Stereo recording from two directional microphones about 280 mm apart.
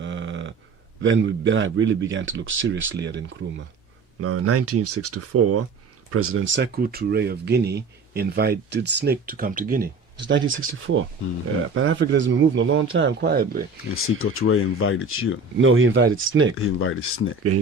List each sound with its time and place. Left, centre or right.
0.0 s a sound: right
1.0 s speech: right
4.2 s speech: right
10.2 s speech: right
13.9 s speech: left
15.5 s speech: right
16.8 s speech: left